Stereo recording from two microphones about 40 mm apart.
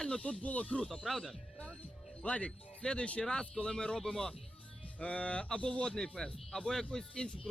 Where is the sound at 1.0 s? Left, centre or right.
Centre.